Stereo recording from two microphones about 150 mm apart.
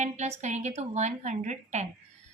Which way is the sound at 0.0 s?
50° right (ahead or behind).